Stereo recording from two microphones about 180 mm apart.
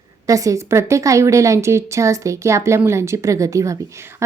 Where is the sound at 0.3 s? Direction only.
20° right (ahead or behind).